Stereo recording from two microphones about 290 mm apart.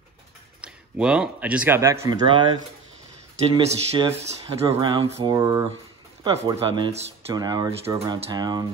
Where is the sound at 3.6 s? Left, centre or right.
Centre.